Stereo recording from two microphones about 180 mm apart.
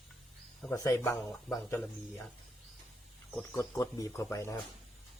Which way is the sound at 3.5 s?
20° left (ahead or behind).